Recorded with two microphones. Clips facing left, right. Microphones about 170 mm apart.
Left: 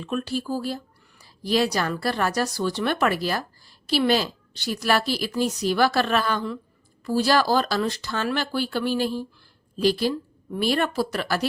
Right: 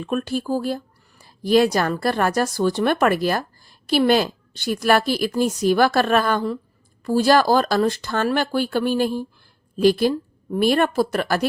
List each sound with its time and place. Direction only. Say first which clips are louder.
0.0 s a woman's voice: right 4 dB; 50° right (ahead or behind)